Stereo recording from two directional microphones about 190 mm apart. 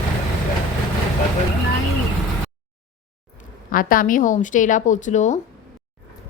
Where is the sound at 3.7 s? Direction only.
45° left (ahead or behind).